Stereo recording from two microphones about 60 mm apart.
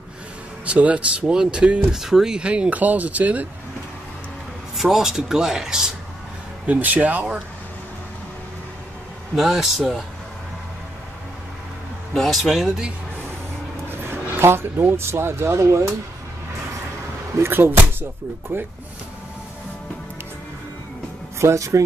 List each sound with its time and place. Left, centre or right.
0.7 s speech: right
4.7 s speech: centre
6.6 s speech: right
9.3 s a man's voice: centre
12.3 s a man's voice: centre
13.8 s speech: right
17.4 s speech: right
21.4 s speech: right